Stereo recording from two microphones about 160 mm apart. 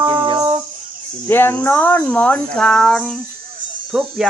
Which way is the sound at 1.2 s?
15° left (ahead or behind).